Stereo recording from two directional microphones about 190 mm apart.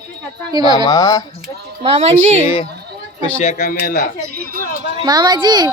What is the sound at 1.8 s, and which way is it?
Speech, 35° right (ahead or behind).